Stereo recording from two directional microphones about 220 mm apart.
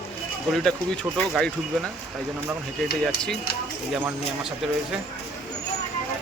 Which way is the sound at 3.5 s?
45° left (ahead or behind).